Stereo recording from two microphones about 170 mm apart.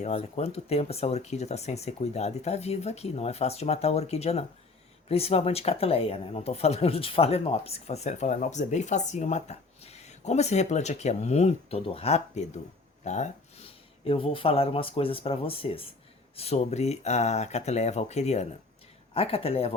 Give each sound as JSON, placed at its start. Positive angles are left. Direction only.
{"t": 0.0, "sound": "speech", "side_deg": 40}